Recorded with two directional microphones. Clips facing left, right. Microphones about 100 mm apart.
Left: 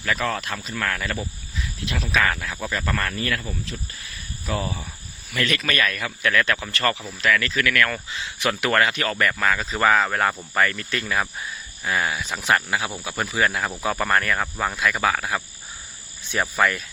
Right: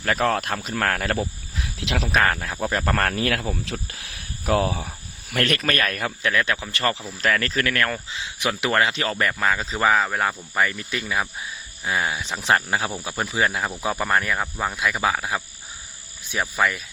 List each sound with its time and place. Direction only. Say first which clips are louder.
0.0 s speech: right 3 dB; 55° right (ahead or behind)
1.5 s speech: right 3 dB; 75° right (ahead or behind)
2.1 s speech: right 1 dB; 40° right (ahead or behind); by 3.4 s 60° right (ahead or behind)
3.5 s speech: right 3 dB; 80° right
5.3 s speech: right 2 dB; 55° right (ahead or behind)
6.1 s speech: left 2 dB; 20° right (ahead or behind)
7.2 s speech: left 1 dB; 40° right (ahead or behind)
7.9 s speech: even; 15° right (ahead or behind); by 12.9 s 35° right (ahead or behind)
13.1 s speech: left 1 dB; 20° right (ahead or behind)
16.3 s speech: left 1 dB; 5° right (ahead or behind)